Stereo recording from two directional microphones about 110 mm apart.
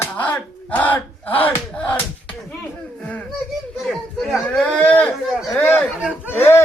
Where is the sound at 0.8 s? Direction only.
15° left (ahead or behind).